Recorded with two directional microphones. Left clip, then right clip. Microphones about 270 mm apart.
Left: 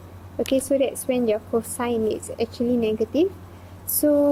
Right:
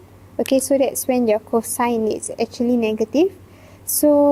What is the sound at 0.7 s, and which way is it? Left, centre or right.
Speech, right.